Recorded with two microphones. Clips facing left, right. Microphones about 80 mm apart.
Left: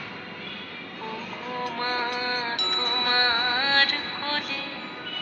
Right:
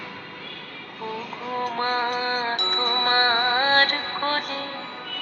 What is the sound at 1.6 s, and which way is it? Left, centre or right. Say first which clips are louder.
Music: right 4 dB; right.